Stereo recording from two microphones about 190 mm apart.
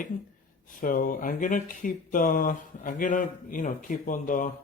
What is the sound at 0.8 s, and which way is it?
Speech, 45° left (ahead or behind).